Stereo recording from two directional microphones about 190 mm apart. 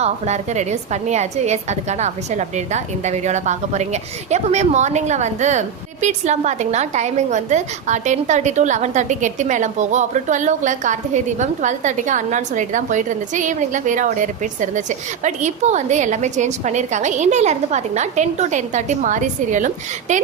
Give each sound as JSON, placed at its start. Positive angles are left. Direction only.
{"t": 0.0, "sound": "a woman's voice", "side_deg": -35}